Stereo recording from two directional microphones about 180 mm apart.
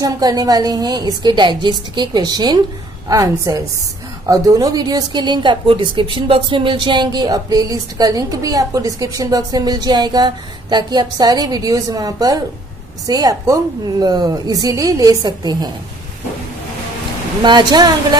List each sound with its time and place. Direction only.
0.0 s a woman's voice: 20° right (ahead or behind)
17.4 s a woman's voice: 25° right (ahead or behind)